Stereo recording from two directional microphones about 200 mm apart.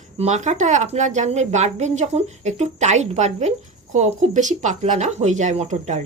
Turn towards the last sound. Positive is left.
turn(degrees=-35)  # may be behind; listen again after turning